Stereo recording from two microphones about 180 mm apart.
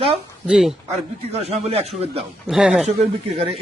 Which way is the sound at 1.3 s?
35° right (ahead or behind).